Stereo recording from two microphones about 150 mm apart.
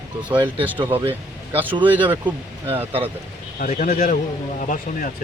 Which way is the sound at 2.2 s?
35° right (ahead or behind).